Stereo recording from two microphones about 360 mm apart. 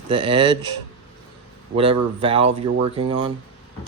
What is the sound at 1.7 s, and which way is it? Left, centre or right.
Speech, centre.